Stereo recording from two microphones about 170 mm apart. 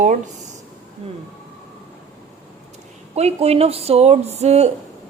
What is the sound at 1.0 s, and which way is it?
Speech, 35° right (ahead or behind).